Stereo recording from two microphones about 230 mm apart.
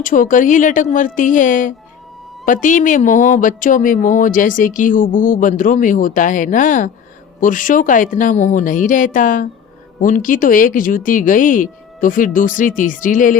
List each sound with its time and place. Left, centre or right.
0.0 s speech: left